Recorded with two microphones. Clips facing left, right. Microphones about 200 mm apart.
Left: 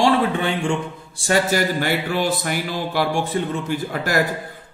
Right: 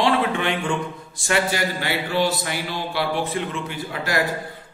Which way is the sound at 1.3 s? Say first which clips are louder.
Left 4 dB; 45° left (ahead or behind).